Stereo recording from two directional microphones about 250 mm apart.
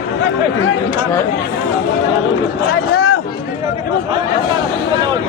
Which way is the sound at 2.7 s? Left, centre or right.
Left.